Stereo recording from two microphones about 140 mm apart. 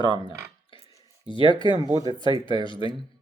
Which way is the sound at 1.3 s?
35° left (ahead or behind).